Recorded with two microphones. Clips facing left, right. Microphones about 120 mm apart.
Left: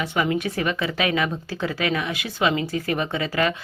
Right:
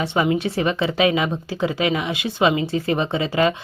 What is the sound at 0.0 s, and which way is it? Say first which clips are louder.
A woman's voice: right 3 dB; 25° right (ahead or behind).